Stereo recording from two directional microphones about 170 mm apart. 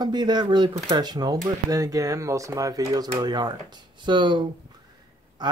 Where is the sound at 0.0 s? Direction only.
25° right (ahead or behind).